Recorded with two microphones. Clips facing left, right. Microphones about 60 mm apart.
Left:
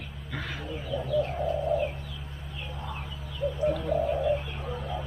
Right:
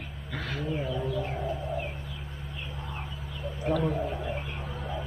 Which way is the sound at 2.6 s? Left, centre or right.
Centre.